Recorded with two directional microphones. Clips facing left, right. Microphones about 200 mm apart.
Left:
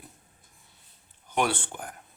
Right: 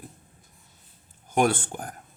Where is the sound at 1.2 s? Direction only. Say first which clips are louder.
Right 5 dB; 45° right (ahead or behind).